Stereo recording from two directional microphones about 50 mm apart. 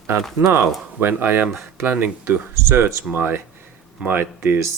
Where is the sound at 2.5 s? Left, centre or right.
Right.